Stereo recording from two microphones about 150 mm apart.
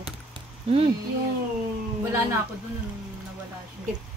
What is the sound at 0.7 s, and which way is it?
Speech, 40° right (ahead or behind).